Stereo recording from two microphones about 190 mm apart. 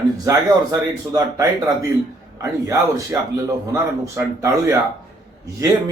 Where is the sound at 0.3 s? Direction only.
15° right (ahead or behind).